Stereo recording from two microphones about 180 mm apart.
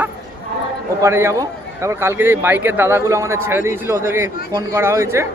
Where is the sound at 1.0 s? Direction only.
15° right (ahead or behind).